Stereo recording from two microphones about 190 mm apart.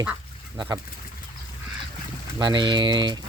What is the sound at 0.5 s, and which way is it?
Speech, 20° right (ahead or behind).